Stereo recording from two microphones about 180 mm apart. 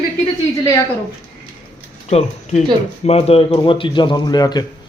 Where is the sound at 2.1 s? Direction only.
35° left (ahead or behind).